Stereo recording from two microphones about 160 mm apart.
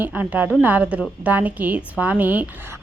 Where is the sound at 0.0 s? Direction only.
10° right (ahead or behind).